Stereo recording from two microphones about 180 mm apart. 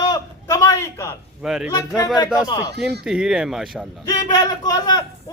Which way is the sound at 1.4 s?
5° right (ahead or behind).